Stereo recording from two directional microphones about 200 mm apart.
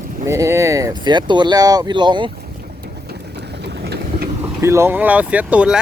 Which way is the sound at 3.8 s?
55° right (ahead or behind).